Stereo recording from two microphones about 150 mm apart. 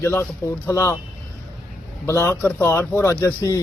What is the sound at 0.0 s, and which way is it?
Speech, 15° left (ahead or behind).